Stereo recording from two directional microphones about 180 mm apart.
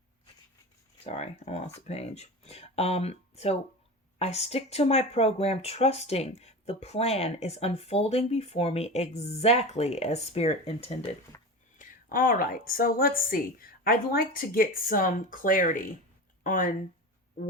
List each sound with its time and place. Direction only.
1.0 s speech: 35° left (ahead or behind)
11.3 s a sound: 15° left (ahead or behind)
11.8 s a woman's voice: 50° left (ahead or behind)